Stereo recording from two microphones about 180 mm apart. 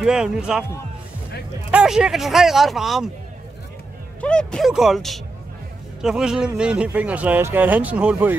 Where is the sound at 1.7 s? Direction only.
5° right (ahead or behind).